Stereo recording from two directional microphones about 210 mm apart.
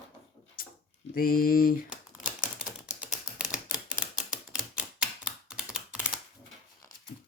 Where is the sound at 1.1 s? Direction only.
40° left (ahead or behind).